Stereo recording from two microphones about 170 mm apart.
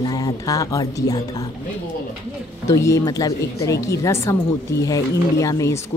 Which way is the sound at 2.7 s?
15° left (ahead or behind).